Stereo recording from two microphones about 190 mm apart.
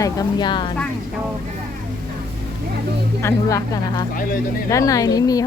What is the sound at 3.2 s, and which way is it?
Speech, 15° left (ahead or behind).